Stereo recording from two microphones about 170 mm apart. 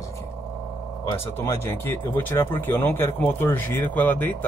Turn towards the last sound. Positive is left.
turn(degrees=10)  # may be behind; listen again after turning